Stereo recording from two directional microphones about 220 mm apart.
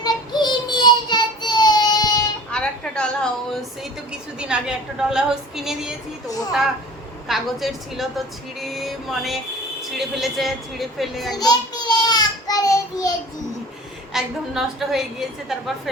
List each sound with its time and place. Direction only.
0.0 s child singing: 20° left (ahead or behind)
2.5 s a sound: 5° left (ahead or behind)
4.4 s a woman's voice: 5° right (ahead or behind)
11.3 s child singing: 20° left (ahead or behind)
14.1 s a woman's voice: centre (ahead or behind)